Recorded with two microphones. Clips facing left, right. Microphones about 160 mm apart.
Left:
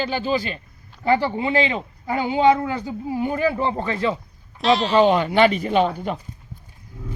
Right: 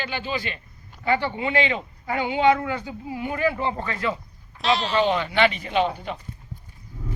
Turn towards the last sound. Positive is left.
turn(degrees=45)  # may be behind; listen again after turning